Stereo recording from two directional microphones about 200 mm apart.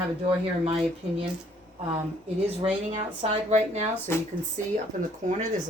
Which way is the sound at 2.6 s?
30° right (ahead or behind).